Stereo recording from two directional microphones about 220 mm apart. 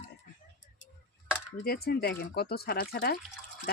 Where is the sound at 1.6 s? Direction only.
45° left (ahead or behind).